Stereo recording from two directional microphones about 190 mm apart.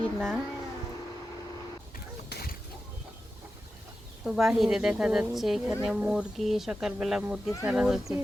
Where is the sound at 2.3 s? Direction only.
55° left (ahead or behind).